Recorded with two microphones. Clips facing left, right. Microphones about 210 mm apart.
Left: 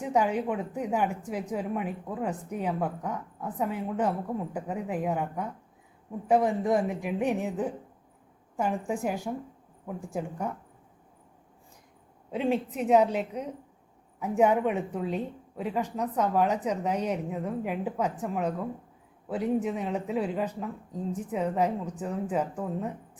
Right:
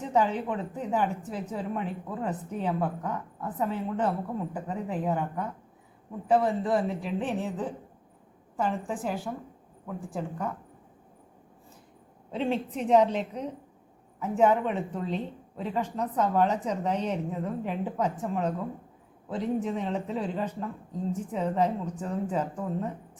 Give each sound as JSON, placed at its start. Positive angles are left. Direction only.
{"t": 0.0, "sound": "speech", "side_deg": 10}
{"t": 12.3, "sound": "speech", "side_deg": 10}